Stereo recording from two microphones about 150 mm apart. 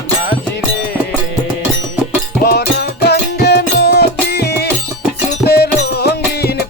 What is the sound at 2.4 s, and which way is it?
Music, 90° left.